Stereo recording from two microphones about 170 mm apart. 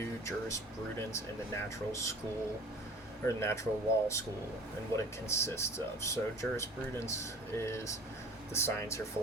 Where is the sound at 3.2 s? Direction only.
15° left (ahead or behind).